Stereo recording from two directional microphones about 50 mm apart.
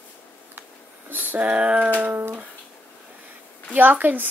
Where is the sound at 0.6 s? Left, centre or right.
Right.